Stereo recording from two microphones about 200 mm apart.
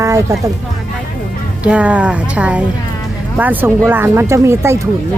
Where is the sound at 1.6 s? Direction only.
5° right (ahead or behind).